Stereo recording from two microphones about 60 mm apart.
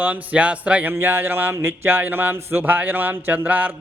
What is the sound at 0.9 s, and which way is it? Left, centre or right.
Speech, right.